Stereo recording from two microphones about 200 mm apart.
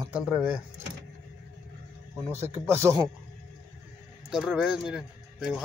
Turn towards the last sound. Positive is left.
turn(degrees=-5)  # may be behind; listen again after turning